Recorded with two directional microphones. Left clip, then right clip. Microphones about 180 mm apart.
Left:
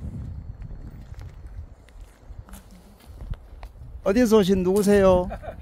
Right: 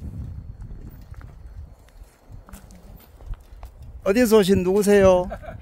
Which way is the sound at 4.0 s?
10° right (ahead or behind).